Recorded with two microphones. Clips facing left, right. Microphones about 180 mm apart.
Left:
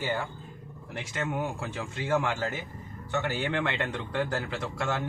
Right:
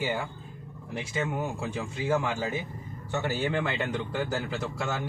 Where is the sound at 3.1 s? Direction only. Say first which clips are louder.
Right 1 dB; 10° right (ahead or behind).